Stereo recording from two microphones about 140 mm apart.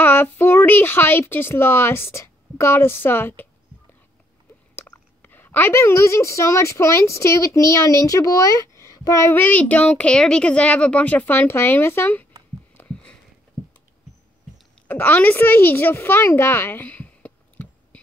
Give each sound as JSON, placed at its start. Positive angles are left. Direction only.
{"t": 0.0, "sound": "speech", "side_deg": 15}
{"t": 4.9, "sound": "a woman's voice", "side_deg": 15}
{"t": 12.7, "sound": "a sound", "side_deg": 10}
{"t": 14.9, "sound": "a woman's voice", "side_deg": 10}